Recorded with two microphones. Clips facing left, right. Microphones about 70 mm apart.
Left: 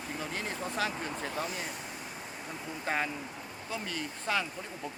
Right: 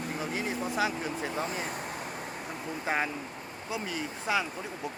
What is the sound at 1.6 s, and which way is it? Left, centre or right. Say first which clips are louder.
Vehicle: right 5 dB; right.